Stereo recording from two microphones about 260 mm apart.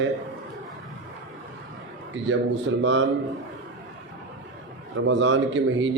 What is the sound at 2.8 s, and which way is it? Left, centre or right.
Speech, right.